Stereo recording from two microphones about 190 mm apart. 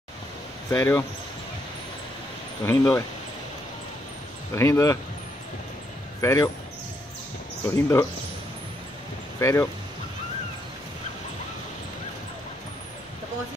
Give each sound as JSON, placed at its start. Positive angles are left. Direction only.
{"t": 0.7, "sound": "speech", "side_deg": 15}
{"t": 2.6, "sound": "speech", "side_deg": 15}
{"t": 4.6, "sound": "speech", "side_deg": 15}
{"t": 6.2, "sound": "speech", "side_deg": 15}
{"t": 7.6, "sound": "speech", "side_deg": 15}
{"t": 9.4, "sound": "speech", "side_deg": 15}